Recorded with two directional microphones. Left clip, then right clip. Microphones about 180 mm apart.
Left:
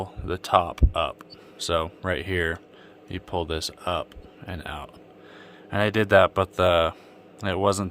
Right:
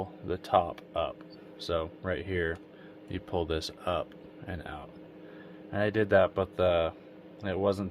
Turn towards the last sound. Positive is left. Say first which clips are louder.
# left 6 dB
turn(degrees=45)  # may be behind; listen again after turning